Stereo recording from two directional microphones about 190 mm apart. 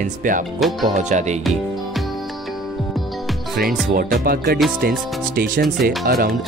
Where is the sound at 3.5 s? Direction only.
50° right (ahead or behind).